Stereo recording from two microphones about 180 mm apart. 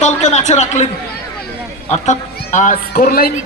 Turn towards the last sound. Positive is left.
turn(degrees=55)  # may be behind; listen again after turning